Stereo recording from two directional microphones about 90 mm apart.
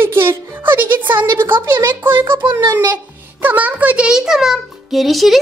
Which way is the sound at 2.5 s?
50° right (ahead or behind).